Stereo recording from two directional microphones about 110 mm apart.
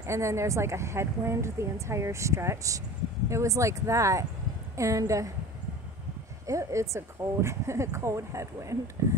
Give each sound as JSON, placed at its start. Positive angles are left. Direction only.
{"t": 0.0, "sound": "a woman's voice", "side_deg": -25}
{"t": 6.4, "sound": "a woman's voice", "side_deg": -30}